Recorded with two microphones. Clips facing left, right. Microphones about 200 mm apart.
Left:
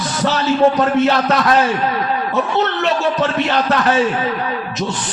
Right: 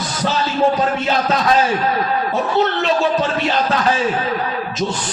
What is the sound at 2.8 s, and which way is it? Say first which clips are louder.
Music: even; 65° left (ahead or behind).